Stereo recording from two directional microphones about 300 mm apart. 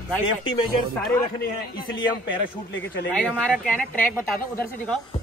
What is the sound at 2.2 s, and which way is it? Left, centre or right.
Speech, left.